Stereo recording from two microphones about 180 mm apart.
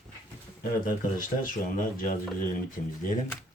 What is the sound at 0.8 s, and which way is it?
Speech, 50° left (ahead or behind).